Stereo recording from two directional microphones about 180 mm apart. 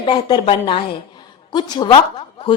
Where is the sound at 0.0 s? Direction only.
25° left (ahead or behind).